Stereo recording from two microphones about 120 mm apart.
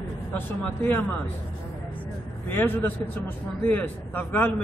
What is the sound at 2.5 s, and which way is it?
A man's voice, 15° left (ahead or behind).